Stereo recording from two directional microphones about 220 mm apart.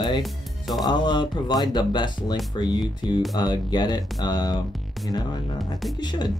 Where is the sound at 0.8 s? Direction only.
20° left (ahead or behind).